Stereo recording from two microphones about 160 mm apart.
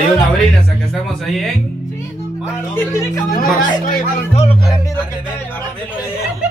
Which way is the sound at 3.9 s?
45° left (ahead or behind).